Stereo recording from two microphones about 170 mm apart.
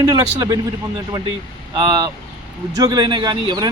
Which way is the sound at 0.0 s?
25° right (ahead or behind).